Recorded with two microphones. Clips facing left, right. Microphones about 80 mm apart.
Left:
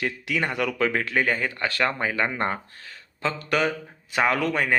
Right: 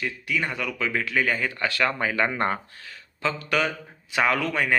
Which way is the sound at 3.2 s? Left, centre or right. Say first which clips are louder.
Left 1 dB; left.